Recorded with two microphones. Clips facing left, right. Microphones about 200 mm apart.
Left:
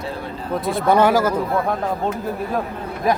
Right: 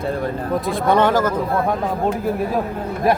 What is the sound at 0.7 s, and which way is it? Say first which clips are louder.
Speech: left 1 dB; 5° left (ahead or behind).